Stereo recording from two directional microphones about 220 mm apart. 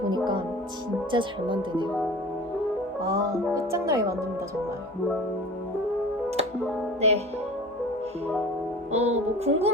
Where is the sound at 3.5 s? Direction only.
15° right (ahead or behind).